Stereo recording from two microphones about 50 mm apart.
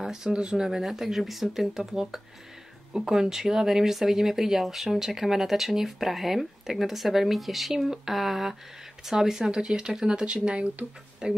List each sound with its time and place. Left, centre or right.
0.0 s speech: centre